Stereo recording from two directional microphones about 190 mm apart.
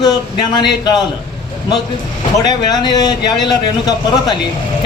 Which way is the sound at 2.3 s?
20° left (ahead or behind).